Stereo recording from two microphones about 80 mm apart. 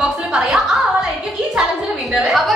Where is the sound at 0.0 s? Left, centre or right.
Centre.